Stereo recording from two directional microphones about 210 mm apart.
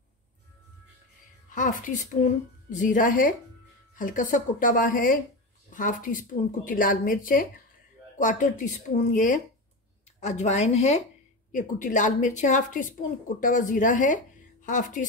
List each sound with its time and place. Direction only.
1.5 s speech: 35° left (ahead or behind)